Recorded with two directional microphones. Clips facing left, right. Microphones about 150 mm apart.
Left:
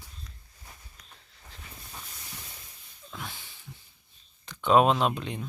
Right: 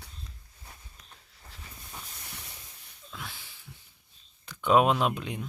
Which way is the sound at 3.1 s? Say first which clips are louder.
Left 2 dB; centre (ahead or behind).